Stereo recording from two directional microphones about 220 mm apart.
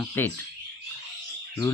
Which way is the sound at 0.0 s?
5° left (ahead or behind).